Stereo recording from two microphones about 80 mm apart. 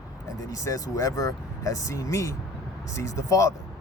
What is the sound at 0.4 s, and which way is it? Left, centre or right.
Speech, left.